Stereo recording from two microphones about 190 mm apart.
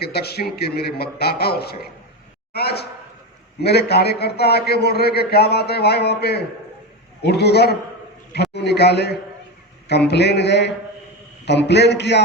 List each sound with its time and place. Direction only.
0.0 s a man's voice: 55° left (ahead or behind)